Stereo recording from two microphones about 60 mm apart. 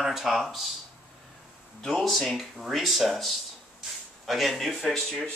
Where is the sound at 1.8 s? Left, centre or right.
Centre.